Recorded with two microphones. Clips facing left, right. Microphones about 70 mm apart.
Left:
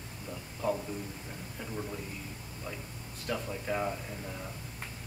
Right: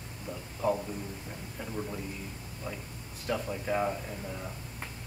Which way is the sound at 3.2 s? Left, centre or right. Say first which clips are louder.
Right 3 dB; centre.